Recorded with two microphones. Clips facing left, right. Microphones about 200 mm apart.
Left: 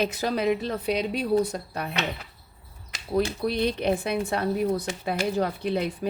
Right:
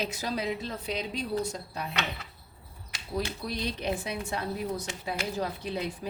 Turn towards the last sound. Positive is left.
turn(degrees=60)  # may be behind; listen again after turning